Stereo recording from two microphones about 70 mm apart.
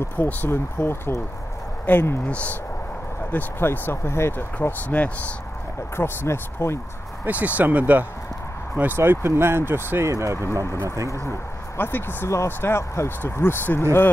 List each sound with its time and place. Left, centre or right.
0.0 s speech: left
2.2 s speech: centre
3.3 s speech: left
4.6 s speech: left
5.9 s speech: left
7.2 s speech: right
8.9 s speech: right
10.0 s speech: right
10.4 s speech: left